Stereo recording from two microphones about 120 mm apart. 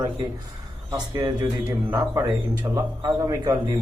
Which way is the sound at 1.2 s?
35° right (ahead or behind).